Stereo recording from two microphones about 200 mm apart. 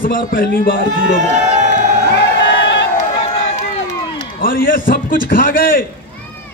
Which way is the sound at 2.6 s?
60° left (ahead or behind).